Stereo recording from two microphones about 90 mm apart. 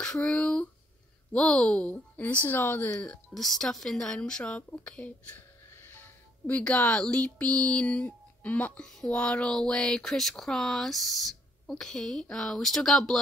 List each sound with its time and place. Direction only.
0.0 s speech: 10° left (ahead or behind)
2.9 s speech: 10° left (ahead or behind)